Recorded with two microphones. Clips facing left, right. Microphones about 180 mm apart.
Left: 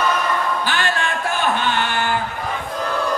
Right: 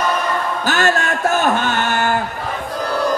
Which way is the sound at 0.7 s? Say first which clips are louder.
Right 5 dB; 45° right (ahead or behind).